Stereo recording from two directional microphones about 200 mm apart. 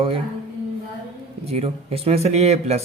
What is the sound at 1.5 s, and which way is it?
Speech, 30° right (ahead or behind).